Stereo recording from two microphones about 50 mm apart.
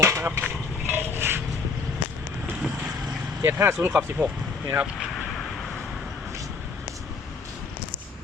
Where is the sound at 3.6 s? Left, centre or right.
Right.